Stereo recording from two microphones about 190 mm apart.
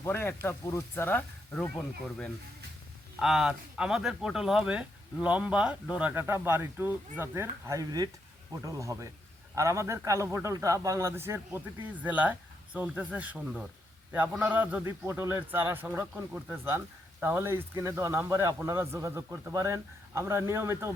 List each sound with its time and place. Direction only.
0.0 s speech: 15° left (ahead or behind)
3.2 s a man's voice: centre (ahead or behind)